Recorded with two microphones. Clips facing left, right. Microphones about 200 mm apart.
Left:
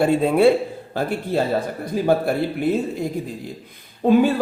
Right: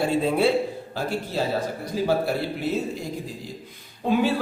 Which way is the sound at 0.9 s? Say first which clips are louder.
Left 6 dB; 55° left (ahead or behind).